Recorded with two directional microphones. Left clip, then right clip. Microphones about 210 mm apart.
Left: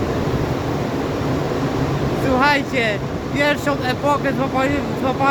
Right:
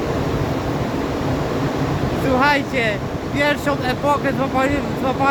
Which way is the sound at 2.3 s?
5° left (ahead or behind).